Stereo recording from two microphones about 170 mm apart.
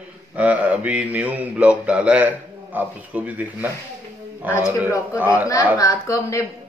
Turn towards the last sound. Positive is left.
turn(degrees=20)  # may be behind; listen again after turning